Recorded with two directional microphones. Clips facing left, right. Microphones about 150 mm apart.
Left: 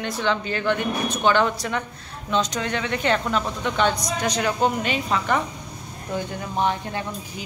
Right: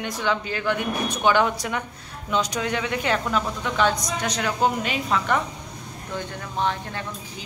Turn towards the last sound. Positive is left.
turn(degrees=15)  # may be behind; listen again after turning